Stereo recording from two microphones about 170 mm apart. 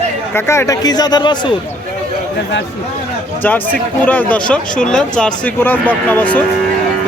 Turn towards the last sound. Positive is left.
turn(degrees=10)  # may be behind; listen again after turning